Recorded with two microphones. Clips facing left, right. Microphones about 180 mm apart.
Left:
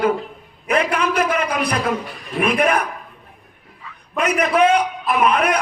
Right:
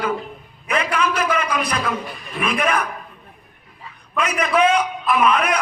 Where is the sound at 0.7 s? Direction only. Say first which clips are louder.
Left 3 dB; 55° left (ahead or behind).